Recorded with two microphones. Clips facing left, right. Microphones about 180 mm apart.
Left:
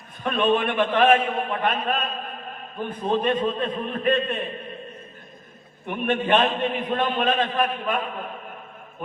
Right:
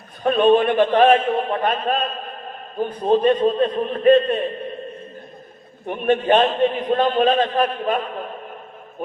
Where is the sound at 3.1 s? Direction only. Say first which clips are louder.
Right 7 dB; 35° right (ahead or behind).